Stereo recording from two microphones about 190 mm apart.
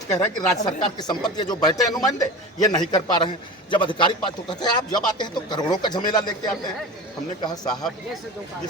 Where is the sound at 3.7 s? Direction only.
25° left (ahead or behind).